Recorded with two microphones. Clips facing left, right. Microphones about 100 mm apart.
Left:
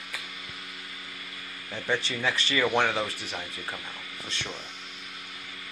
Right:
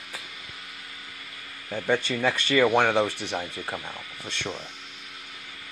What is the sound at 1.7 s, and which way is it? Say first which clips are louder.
Speech: right 5 dB; 50° right (ahead or behind).